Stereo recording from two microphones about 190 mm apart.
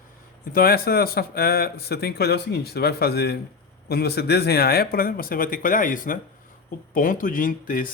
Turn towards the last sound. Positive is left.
turn(degrees=45)  # may be behind; listen again after turning